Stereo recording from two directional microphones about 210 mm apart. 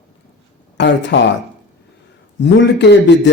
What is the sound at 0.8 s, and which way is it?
Speech, 55° left (ahead or behind).